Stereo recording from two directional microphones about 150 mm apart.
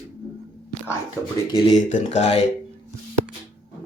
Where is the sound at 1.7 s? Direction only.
55° left (ahead or behind).